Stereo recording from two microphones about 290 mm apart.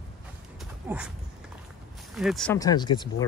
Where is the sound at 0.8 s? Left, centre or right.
Centre.